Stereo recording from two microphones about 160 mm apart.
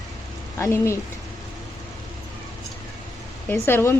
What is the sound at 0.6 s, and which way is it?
Speech, 20° left (ahead or behind).